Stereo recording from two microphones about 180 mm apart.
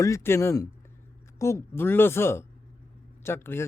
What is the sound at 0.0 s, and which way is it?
Speech, 15° left (ahead or behind).